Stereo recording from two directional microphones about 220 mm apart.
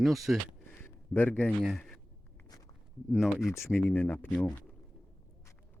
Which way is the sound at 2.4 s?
15° left (ahead or behind).